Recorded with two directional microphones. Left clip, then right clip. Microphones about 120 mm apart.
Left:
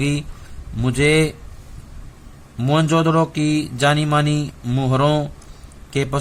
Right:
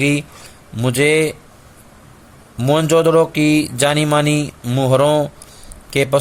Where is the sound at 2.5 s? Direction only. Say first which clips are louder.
Right 4 dB; 35° right (ahead or behind).